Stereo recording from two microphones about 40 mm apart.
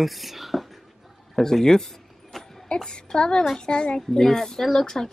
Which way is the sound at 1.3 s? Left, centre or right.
Centre.